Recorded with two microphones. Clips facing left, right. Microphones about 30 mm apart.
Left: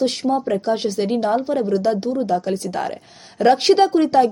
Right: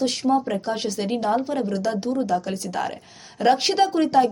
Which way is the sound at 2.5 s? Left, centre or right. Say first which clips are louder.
Left 3 dB; left.